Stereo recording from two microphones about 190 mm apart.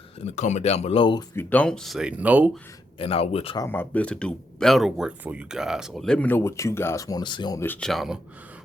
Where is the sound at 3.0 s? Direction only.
30° left (ahead or behind).